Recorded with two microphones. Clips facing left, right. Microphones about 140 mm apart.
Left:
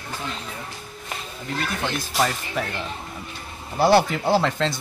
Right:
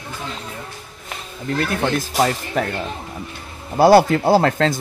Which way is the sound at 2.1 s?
50° right (ahead or behind).